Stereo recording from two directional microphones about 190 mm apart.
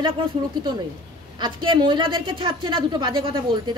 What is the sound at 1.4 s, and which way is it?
A woman's voice, 25° right (ahead or behind).